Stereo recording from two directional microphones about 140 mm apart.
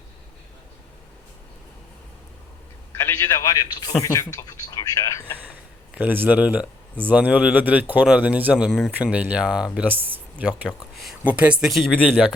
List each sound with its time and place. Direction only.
3.0 s a man's voice: 15° left (ahead or behind)
3.5 s speech: 30° left (ahead or behind)
5.9 s a man's voice: 10° right (ahead or behind); by 12.2 s 5° left (ahead or behind)